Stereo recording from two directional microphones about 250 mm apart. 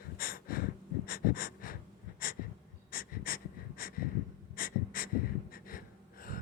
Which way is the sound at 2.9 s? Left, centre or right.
Left.